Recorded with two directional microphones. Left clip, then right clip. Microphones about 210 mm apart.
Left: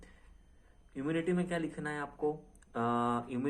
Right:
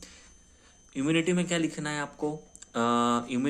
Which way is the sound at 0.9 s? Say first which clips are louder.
Right 7 dB; 30° right (ahead or behind).